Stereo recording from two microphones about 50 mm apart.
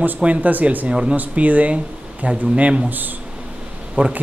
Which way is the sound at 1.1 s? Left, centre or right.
Right.